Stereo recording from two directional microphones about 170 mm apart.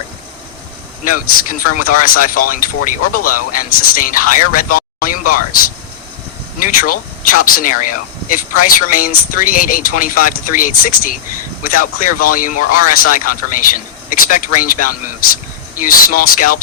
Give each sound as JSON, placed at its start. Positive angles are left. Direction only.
{"t": 1.0, "sound": "speech", "side_deg": 55}